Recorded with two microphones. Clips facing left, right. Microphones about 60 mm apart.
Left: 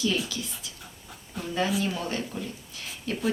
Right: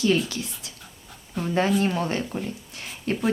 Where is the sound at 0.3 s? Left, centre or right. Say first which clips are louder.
Right 2 dB; right.